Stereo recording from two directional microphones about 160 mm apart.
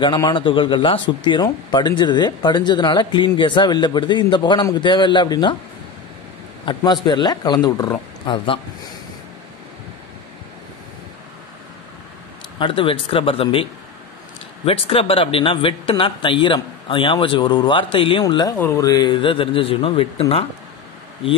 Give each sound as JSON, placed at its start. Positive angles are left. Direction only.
{"t": 0.0, "sound": "speech", "side_deg": 30}
{"t": 6.6, "sound": "speech", "side_deg": 30}
{"t": 12.5, "sound": "speech", "side_deg": 30}